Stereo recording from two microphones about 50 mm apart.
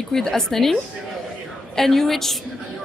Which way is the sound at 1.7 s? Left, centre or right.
Centre.